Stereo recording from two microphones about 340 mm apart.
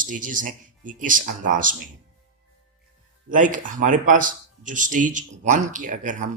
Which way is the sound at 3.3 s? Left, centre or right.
Right.